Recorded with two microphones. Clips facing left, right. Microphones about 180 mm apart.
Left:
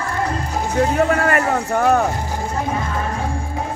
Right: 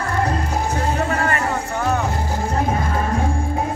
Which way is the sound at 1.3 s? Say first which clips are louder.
Left 4 dB; 55° left (ahead or behind).